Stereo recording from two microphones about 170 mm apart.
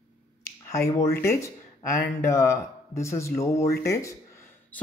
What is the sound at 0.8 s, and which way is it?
Speech, 15° left (ahead or behind).